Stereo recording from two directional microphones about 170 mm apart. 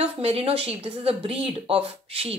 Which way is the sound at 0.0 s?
35° right (ahead or behind).